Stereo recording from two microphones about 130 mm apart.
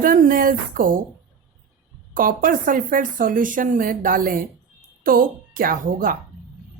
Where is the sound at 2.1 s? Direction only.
90° right.